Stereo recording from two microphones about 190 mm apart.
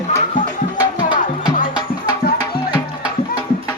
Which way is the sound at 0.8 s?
25° left (ahead or behind).